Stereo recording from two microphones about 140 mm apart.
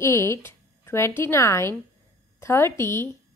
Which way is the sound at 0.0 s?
20° left (ahead or behind).